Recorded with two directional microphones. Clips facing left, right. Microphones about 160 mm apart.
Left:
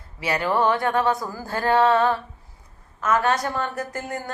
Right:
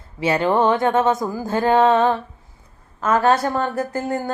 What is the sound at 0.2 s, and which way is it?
A woman's voice, 25° right (ahead or behind).